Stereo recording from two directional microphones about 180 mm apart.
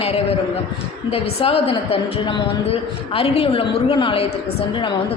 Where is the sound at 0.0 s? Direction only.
35° left (ahead or behind).